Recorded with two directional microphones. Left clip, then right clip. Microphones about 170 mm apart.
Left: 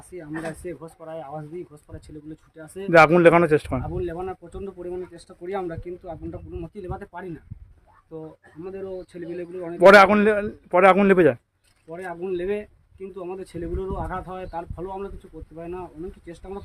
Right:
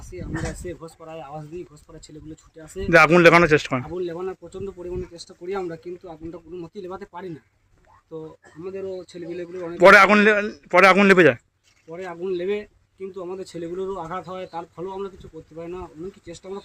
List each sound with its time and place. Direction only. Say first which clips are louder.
0.2 s a man's voice: even; 5° left (ahead or behind)
2.9 s a man's voice: right 1 dB; 5° right (ahead or behind)
3.8 s speech: right 1 dB; 10° left (ahead or behind)
8.7 s speech: right 2 dB; 10° left (ahead or behind)
9.7 s a man's voice: even; 10° right (ahead or behind)
11.9 s speech: right 1 dB; 15° left (ahead or behind)